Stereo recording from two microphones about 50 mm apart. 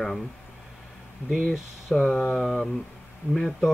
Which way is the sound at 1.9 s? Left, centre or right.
Left.